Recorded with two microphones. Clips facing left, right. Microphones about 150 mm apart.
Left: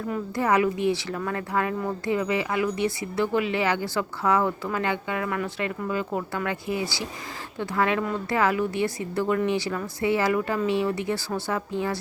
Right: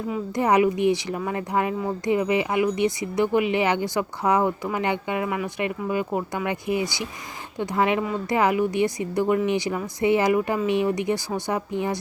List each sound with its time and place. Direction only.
0.3 s speech: 20° right (ahead or behind)